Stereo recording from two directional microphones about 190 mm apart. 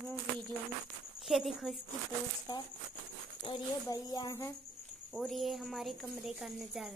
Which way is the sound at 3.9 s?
20° left (ahead or behind).